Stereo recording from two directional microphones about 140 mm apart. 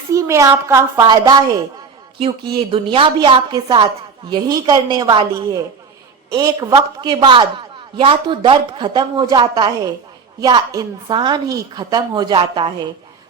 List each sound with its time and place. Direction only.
0.1 s a woman's voice: 20° right (ahead or behind)
2.6 s a woman's voice: 40° right (ahead or behind)